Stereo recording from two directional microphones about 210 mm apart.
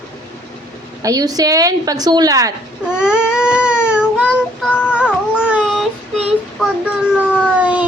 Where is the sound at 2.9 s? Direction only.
5° right (ahead or behind).